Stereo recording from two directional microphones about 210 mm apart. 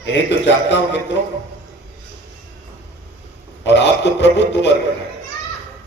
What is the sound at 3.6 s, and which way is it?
A man's voice, 55° left (ahead or behind).